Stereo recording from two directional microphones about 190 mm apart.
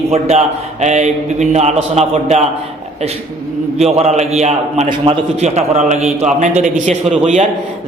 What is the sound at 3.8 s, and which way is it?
A man's voice, 35° right (ahead or behind).